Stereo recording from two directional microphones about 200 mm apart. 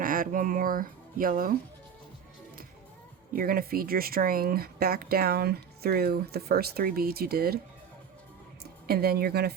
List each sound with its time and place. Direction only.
0.0 s speech: 45° right (ahead or behind)
3.3 s speech: 45° right (ahead or behind)
8.9 s speech: 50° right (ahead or behind)